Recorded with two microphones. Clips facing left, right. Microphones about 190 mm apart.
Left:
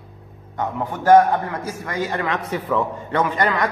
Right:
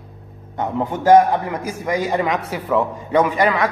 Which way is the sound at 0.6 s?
20° right (ahead or behind).